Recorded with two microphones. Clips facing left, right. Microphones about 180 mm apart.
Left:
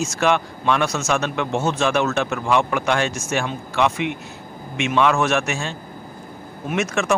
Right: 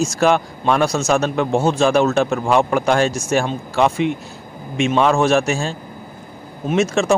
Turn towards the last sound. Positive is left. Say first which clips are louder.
# right 5 dB
turn(degrees=-30)  # may be behind; listen again after turning